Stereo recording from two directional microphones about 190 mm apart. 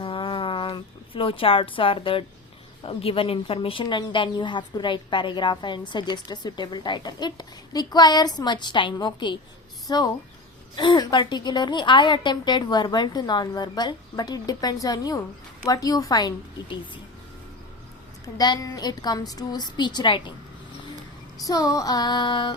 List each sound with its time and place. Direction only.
0.0 s a sound: 30° left (ahead or behind)
2.8 s speech: 30° left (ahead or behind)
18.3 s speech: 20° left (ahead or behind)
21.3 s speech: 20° left (ahead or behind)